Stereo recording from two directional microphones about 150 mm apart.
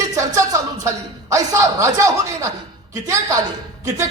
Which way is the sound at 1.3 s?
20° right (ahead or behind).